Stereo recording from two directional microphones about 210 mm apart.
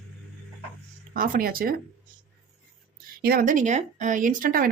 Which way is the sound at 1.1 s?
40° right (ahead or behind).